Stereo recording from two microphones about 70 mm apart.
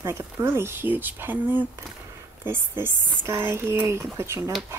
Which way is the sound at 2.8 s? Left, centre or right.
Right.